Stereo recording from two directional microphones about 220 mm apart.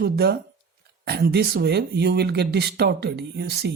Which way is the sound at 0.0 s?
45° right (ahead or behind).